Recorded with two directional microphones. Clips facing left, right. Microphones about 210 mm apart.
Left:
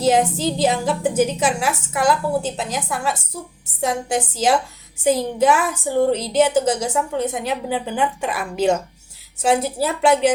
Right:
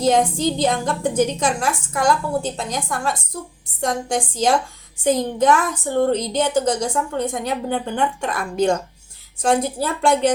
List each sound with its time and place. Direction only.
0.0 s a woman's voice: 5° left (ahead or behind)